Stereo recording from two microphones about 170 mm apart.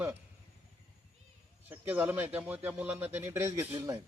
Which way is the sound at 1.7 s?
10° right (ahead or behind).